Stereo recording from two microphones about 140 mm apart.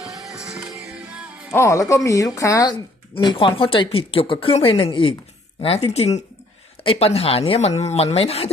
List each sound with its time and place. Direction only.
0.0 s music: centre (ahead or behind)
1.5 s speech: 20° left (ahead or behind)
2.7 s speech: 35° left (ahead or behind)
5.9 s speech: 50° left (ahead or behind)